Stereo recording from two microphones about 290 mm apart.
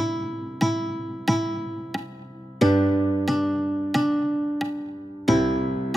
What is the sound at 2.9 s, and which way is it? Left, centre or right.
Music, centre.